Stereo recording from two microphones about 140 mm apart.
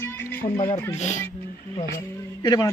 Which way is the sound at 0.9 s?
55° left (ahead or behind).